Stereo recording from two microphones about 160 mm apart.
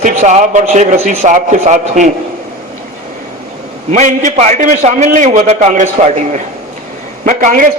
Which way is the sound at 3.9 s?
50° right (ahead or behind).